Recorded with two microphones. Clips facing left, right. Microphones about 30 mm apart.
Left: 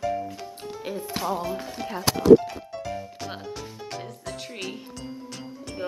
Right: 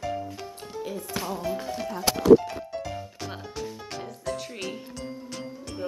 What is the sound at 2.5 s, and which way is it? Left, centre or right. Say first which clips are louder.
Music: even; centre.